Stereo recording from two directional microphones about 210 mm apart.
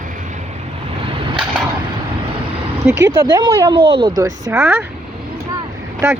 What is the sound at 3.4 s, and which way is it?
Speech, 20° right (ahead or behind).